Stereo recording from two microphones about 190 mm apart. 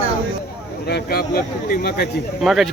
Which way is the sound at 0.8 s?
55° left (ahead or behind).